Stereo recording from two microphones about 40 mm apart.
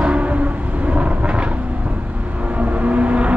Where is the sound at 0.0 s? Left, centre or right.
Right.